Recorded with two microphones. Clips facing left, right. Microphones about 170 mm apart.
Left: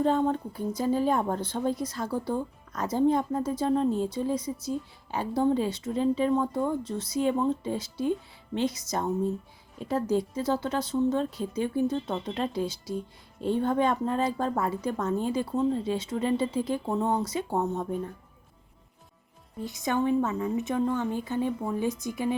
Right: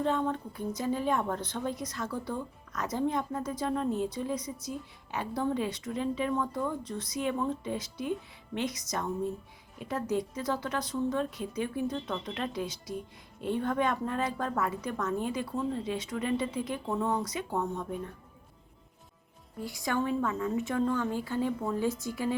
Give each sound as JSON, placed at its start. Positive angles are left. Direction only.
{"t": 0.0, "sound": "a woman's voice", "side_deg": 35}
{"t": 19.6, "sound": "a woman's voice", "side_deg": 20}